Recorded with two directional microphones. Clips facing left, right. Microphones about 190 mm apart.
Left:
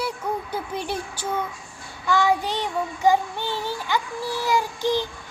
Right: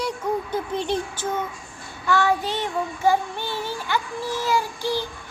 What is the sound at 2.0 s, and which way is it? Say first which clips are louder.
Child singing: even; 15° left (ahead or behind).